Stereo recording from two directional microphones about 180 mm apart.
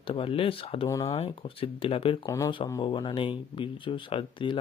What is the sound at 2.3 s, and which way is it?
Speech, 15° left (ahead or behind).